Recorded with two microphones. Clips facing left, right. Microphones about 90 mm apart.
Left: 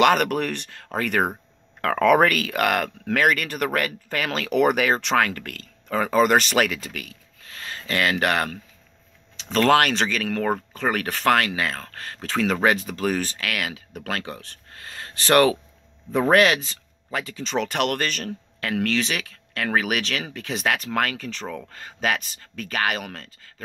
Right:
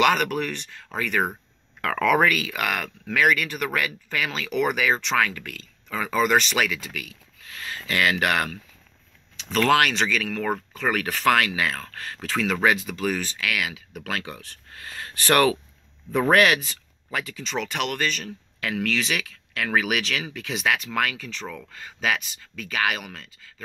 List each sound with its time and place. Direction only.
0.0 s speech: 45° left (ahead or behind)
1.2 s speech: 35° left (ahead or behind)
2.2 s speech: 50° left (ahead or behind)